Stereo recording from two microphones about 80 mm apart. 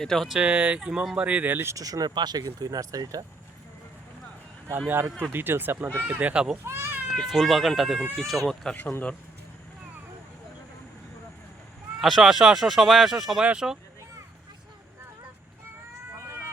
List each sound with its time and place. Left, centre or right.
0.0 s speech: centre
0.3 s speech: centre
1.7 s speech: right
4.9 s speech: right
6.7 s speech: right
7.2 s speech: centre
8.7 s speech: left
11.9 s speech: centre